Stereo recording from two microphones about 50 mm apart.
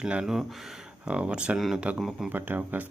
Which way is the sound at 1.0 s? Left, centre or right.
Right.